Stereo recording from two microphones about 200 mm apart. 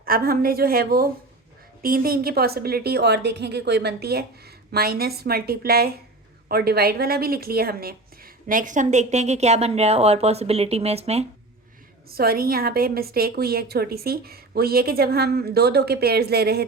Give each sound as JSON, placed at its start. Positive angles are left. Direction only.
{"t": 0.0, "sound": "a woman's voice", "side_deg": -45}
{"t": 12.0, "sound": "a woman's voice", "side_deg": -50}